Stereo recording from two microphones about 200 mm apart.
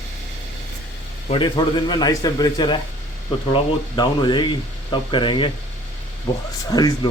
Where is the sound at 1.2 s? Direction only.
25° left (ahead or behind).